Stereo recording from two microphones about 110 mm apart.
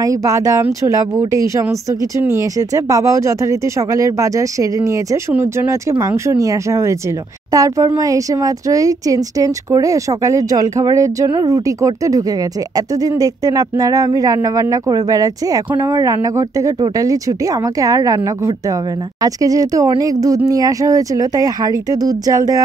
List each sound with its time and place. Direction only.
0.0 s speech: 30° right (ahead or behind)